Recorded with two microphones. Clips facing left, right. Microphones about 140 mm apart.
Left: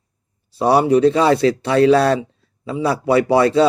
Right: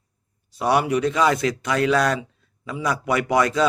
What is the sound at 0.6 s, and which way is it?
Speech, 30° left (ahead or behind).